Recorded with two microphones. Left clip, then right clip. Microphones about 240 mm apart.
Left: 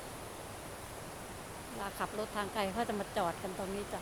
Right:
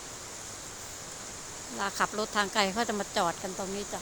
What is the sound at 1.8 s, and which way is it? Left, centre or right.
Speech, right.